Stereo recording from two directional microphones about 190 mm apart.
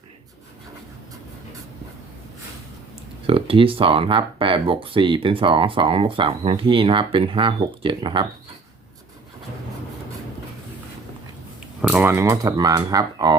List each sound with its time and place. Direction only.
3.2 s speech: 30° right (ahead or behind)
11.8 s speech: 5° right (ahead or behind); by 13.3 s 20° right (ahead or behind)